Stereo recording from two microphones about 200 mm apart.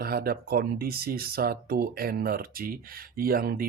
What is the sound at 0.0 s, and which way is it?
Speech, 50° right (ahead or behind).